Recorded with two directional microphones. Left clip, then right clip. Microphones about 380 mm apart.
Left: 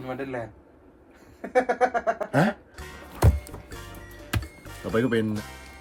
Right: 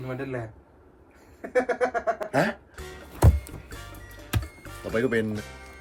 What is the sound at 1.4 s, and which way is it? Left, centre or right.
Music, left.